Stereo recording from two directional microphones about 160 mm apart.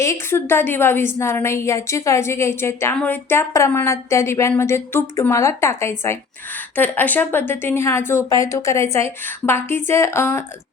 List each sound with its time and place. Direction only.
0.0 s a woman's voice: 15° left (ahead or behind)